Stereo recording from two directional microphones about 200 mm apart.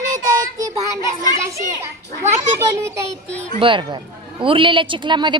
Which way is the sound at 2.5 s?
15° right (ahead or behind).